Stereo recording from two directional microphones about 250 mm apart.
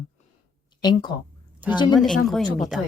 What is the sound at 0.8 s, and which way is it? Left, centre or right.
A woman's voice, centre.